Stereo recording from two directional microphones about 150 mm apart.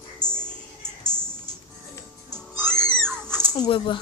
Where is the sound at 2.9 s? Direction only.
5° left (ahead or behind).